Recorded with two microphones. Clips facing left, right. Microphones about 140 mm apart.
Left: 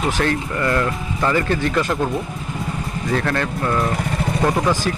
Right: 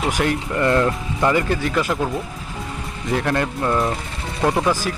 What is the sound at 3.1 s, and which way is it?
Speech, 15° right (ahead or behind).